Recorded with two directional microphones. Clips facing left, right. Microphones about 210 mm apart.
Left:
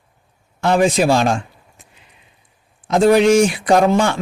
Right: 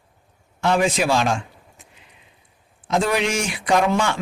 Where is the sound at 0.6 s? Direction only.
35° left (ahead or behind).